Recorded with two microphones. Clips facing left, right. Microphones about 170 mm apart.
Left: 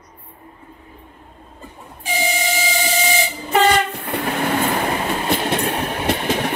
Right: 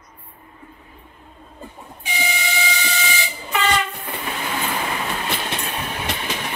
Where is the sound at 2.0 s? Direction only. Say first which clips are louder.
Left 5 dB; 45° left (ahead or behind).